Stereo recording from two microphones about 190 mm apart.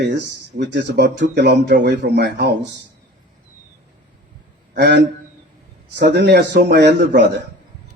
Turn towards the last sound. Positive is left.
turn(degrees=-60)  # may be behind; listen again after turning